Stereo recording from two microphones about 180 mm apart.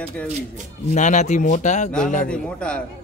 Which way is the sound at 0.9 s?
40° left (ahead or behind).